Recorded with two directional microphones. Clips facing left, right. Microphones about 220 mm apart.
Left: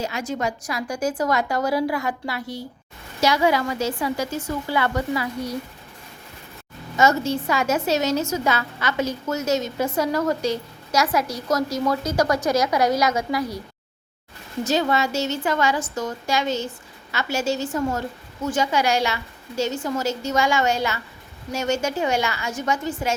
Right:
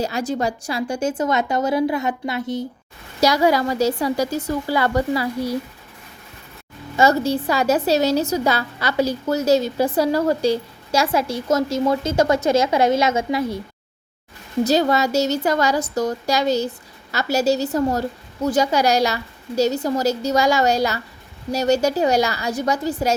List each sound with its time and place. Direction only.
0.0 s a woman's voice: 35° right (ahead or behind)
3.2 s a woman's voice: 40° right (ahead or behind)
6.9 s a woman's voice: 35° right (ahead or behind)
14.6 s a woman's voice: 40° right (ahead or behind)